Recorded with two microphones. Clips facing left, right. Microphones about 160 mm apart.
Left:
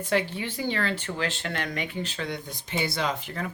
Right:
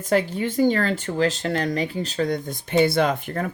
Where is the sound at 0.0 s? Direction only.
40° right (ahead or behind).